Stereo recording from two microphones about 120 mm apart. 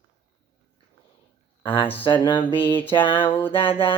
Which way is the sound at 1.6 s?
45° left (ahead or behind).